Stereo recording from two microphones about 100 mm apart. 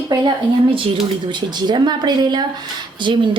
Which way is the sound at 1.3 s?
50° right (ahead or behind).